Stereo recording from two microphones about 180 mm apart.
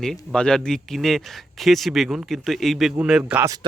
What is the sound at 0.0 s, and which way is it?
A man's voice, 5° left (ahead or behind).